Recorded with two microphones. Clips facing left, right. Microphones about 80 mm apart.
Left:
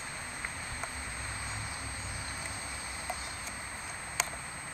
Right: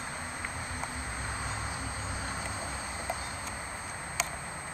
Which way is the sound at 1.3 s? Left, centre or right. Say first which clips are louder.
Right 4 dB; right.